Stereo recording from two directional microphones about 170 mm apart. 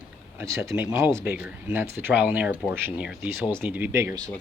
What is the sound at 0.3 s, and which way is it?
Speech, 15° right (ahead or behind).